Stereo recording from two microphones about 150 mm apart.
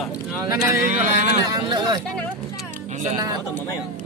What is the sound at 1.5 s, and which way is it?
Speech, 30° right (ahead or behind).